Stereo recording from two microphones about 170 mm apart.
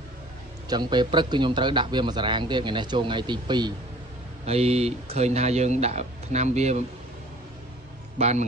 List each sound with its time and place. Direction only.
0.7 s a man's voice: 25° right (ahead or behind)
4.5 s speech: 35° right (ahead or behind)
8.2 s speech: 40° right (ahead or behind)